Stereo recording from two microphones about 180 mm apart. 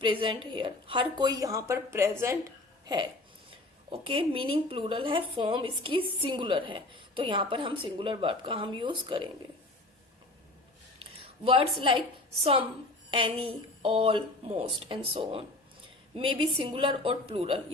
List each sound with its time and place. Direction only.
0.0 s speech: 25° right (ahead or behind)
11.0 s a woman's voice: 30° right (ahead or behind)